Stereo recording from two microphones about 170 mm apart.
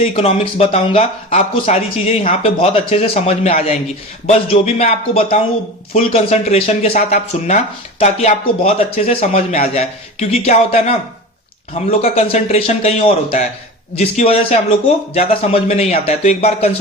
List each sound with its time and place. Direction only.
0.0 s speech: 40° left (ahead or behind)
12.0 s speech: 40° left (ahead or behind)